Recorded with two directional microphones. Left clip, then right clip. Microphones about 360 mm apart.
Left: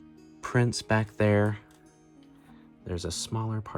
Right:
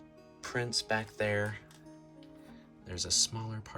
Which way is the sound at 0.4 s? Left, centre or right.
Centre.